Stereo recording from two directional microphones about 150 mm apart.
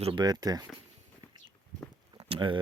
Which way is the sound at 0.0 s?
35° right (ahead or behind).